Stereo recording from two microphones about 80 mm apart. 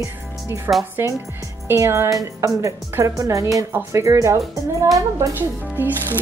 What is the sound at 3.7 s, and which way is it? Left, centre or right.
Speech, right.